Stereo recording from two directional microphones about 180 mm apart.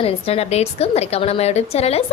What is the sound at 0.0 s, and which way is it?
A woman's voice, 35° left (ahead or behind).